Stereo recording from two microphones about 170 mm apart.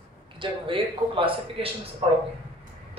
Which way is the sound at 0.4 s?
30° right (ahead or behind).